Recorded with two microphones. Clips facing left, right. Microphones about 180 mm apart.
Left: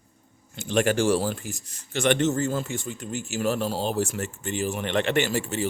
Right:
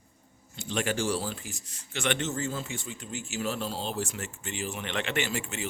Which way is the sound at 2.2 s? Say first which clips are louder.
Left 8 dB; 55° left (ahead or behind).